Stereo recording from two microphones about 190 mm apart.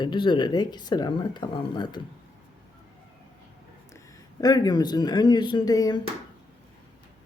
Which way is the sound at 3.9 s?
20° left (ahead or behind).